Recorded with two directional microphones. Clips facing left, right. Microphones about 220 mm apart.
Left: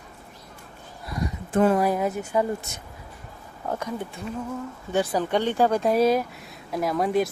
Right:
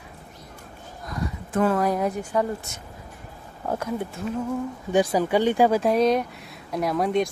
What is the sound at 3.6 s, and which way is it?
Speech, 10° right (ahead or behind).